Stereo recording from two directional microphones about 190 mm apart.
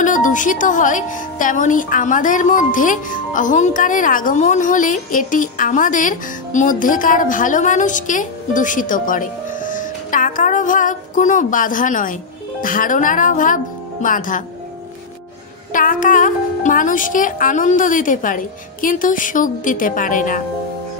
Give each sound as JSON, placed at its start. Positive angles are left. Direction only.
{"t": 0.0, "sound": "a woman's voice", "side_deg": 40}
{"t": 15.7, "sound": "a woman's voice", "side_deg": 45}